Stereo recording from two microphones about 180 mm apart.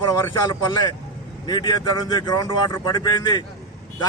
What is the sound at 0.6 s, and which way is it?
Speech, 25° left (ahead or behind).